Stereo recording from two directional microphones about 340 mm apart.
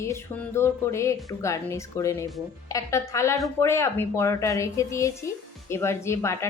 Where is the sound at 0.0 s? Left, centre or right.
Centre.